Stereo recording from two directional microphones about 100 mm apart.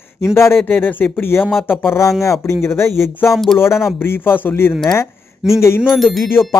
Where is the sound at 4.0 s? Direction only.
20° left (ahead or behind).